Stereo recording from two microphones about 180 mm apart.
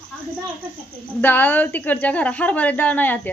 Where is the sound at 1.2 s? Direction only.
10° left (ahead or behind).